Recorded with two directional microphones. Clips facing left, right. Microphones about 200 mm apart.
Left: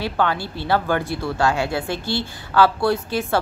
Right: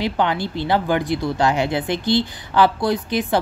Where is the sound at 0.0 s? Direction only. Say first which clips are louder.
Right 2 dB; 20° right (ahead or behind).